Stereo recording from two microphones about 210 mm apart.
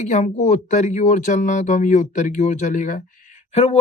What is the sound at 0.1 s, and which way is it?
Speech, 35° left (ahead or behind).